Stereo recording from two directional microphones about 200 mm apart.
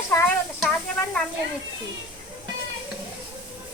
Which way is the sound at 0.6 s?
5° left (ahead or behind).